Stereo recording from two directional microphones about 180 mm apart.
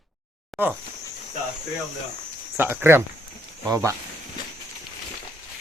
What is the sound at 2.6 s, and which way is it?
Speech, 15° right (ahead or behind).